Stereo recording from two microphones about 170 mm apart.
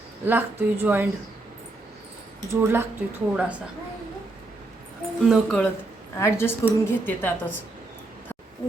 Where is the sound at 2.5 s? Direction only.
15° right (ahead or behind).